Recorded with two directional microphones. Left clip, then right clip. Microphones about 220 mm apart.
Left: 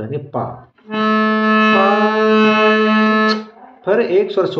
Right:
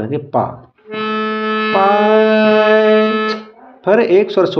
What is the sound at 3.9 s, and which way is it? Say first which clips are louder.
Speech: right 3 dB; 45° right (ahead or behind).